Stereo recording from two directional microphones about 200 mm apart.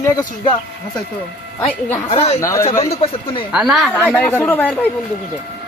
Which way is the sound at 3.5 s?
Centre (ahead or behind).